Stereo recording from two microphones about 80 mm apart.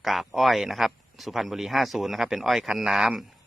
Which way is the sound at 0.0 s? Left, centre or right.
Centre.